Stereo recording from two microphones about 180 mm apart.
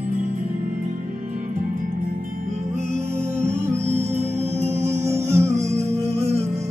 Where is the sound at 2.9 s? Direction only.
35° right (ahead or behind).